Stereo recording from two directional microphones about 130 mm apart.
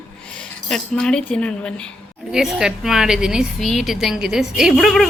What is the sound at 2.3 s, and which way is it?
A woman's voice, 5° right (ahead or behind).